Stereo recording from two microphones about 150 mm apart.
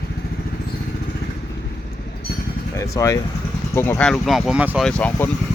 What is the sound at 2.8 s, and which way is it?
Speech, 20° left (ahead or behind).